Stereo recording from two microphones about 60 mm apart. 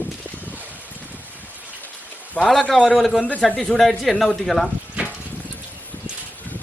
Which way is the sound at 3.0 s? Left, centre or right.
Centre.